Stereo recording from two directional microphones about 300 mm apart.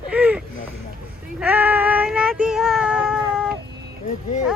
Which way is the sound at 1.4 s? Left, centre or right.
Centre.